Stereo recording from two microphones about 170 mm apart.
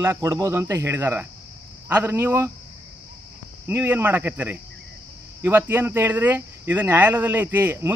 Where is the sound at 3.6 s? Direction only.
10° right (ahead or behind).